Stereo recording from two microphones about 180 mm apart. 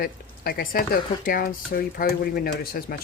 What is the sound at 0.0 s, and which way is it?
Speech, 55° left (ahead or behind).